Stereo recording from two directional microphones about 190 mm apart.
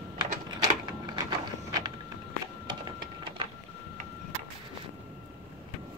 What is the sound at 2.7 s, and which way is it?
Printer, 25° right (ahead or behind).